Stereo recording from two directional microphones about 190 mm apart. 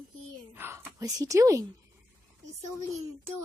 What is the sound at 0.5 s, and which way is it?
A woman's voice, 10° right (ahead or behind).